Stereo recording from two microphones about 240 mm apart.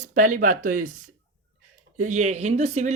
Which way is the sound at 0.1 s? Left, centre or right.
Right.